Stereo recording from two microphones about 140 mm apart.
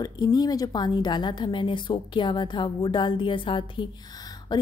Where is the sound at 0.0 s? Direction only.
30° left (ahead or behind).